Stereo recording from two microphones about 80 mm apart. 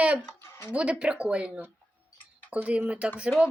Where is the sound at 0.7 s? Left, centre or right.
Centre.